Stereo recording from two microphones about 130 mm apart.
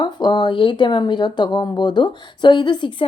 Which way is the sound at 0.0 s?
35° left (ahead or behind).